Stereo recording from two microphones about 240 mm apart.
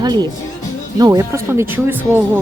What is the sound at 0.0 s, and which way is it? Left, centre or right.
A woman's voice, centre.